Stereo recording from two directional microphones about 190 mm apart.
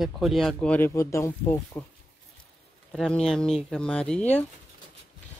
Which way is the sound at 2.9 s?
5° left (ahead or behind).